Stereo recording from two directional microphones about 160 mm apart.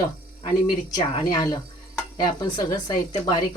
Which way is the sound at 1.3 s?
25° left (ahead or behind).